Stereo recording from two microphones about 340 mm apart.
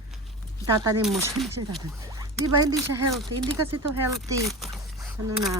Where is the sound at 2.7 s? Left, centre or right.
Right.